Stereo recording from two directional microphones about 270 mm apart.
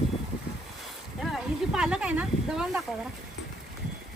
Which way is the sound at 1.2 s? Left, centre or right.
Centre.